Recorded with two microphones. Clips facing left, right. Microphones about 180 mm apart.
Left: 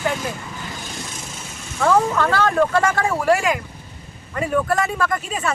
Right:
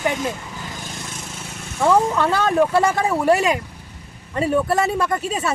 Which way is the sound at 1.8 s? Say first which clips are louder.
Right 1 dB; 20° right (ahead or behind).